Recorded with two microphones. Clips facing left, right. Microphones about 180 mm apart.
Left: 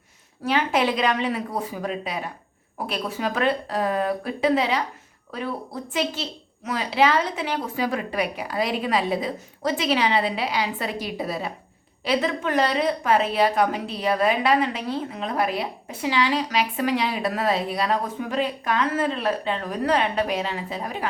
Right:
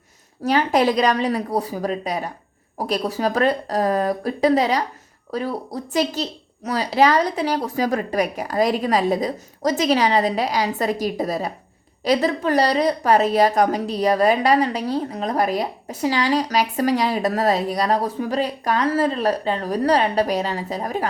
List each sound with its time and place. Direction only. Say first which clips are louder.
0.4 s a woman's voice: right 4 dB; 40° right (ahead or behind)